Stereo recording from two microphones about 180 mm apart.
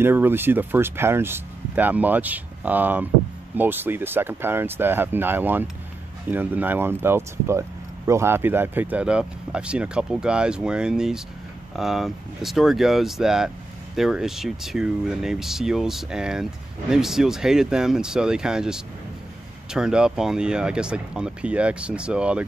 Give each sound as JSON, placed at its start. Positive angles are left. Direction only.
{"t": 0.0, "sound": "speech", "side_deg": -10}